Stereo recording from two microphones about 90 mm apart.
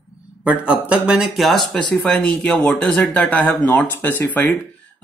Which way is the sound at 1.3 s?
Centre (ahead or behind).